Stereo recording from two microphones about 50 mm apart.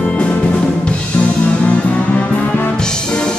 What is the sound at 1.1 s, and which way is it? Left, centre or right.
Music, left.